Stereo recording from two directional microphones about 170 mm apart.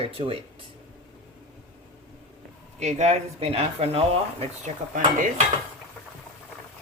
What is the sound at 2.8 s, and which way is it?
Speech, 40° right (ahead or behind).